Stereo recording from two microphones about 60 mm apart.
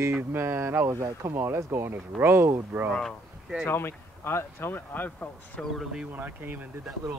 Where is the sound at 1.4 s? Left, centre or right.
Right.